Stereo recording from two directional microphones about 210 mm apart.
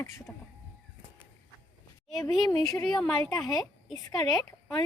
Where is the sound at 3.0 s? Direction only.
Centre (ahead or behind).